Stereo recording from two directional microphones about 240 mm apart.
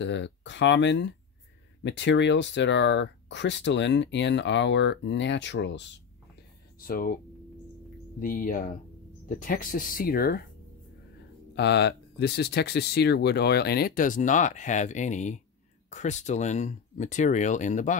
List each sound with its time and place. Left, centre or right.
0.0 s speech: left
6.8 s speech: left
8.2 s speech: left
11.5 s speech: left